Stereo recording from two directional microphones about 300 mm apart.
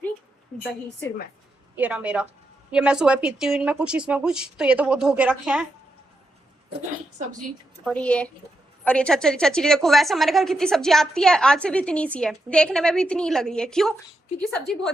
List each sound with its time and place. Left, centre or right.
0.6 s a woman's voice: centre
6.7 s a woman's voice: centre
7.9 s a woman's voice: centre